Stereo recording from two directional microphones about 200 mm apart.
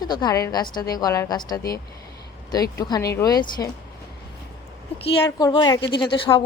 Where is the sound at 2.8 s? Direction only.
15° left (ahead or behind).